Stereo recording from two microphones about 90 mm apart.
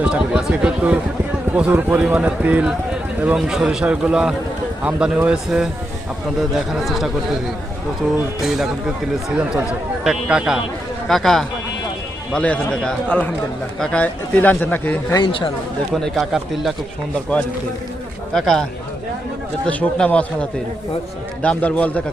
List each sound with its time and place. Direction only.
0.0 s speech: 15° right (ahead or behind)
6.7 s speech: centre (ahead or behind)
10.0 s speech: 10° right (ahead or behind)
11.1 s a man's voice: 5° left (ahead or behind)
14.0 s speech: 20° left (ahead or behind)
15.2 s speech: 70° left (ahead or behind)
16.0 s speech: centre (ahead or behind)
18.3 s speech: 5° left (ahead or behind)
19.6 s a man's voice: 15° left (ahead or behind)